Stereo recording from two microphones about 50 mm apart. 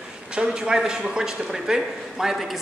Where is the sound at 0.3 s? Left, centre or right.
Centre.